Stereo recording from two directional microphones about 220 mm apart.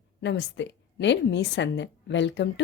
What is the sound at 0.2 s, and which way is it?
A woman's voice, 55° left (ahead or behind).